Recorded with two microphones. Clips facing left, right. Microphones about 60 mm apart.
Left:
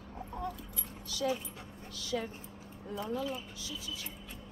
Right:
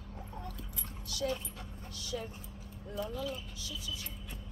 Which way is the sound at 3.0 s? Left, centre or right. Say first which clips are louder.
Left 1 dB; left.